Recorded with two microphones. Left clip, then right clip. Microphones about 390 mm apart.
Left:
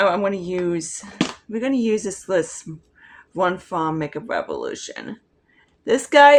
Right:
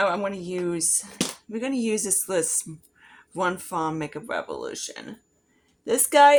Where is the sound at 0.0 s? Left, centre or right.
Right.